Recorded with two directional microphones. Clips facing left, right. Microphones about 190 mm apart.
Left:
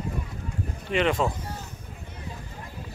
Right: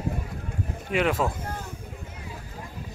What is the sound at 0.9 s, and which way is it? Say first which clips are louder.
Speech: even; 5° right (ahead or behind).